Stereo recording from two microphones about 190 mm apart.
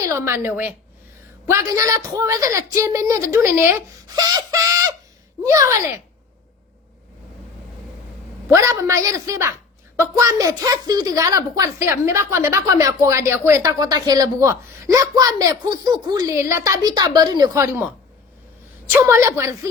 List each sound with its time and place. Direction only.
0.0 s a woman's voice: 15° right (ahead or behind)
8.5 s a woman's voice: 15° right (ahead or behind)